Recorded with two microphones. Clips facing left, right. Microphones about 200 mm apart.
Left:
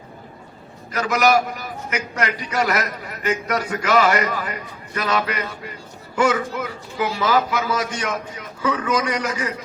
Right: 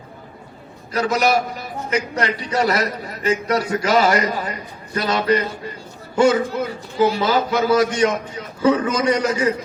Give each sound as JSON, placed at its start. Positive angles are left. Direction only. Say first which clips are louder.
{"t": 0.9, "sound": "a man's voice", "louder": "even", "side_deg": -30}